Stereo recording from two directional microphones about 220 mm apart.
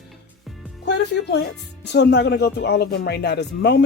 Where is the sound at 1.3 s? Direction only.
50° left (ahead or behind).